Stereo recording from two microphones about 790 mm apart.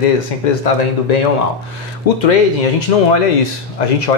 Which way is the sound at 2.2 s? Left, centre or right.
Left.